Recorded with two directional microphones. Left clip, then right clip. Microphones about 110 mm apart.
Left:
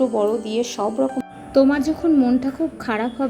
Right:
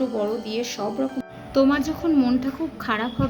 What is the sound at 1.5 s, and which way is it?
Speech, 40° left (ahead or behind).